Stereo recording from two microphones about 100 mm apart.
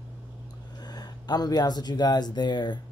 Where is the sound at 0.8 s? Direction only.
45° left (ahead or behind).